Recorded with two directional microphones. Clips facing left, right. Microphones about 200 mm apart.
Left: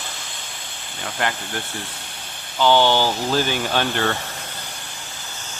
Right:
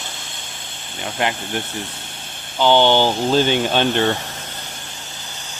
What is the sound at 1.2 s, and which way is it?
Speech, 20° right (ahead or behind).